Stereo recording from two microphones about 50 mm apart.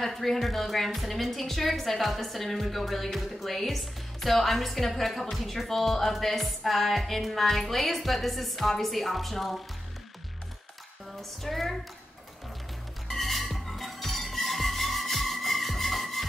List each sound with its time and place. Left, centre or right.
0.0 s a woman's voice: centre
11.1 s a woman's voice: centre
13.1 s music: centre